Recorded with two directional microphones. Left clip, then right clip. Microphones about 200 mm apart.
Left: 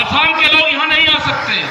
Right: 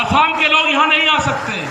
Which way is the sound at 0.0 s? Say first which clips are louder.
Left 2 dB; 45° right (ahead or behind).